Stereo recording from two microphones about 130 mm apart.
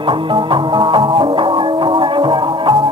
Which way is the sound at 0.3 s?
40° right (ahead or behind).